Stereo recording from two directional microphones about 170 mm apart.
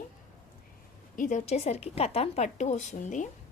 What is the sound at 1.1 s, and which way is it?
Speech, 50° left (ahead or behind).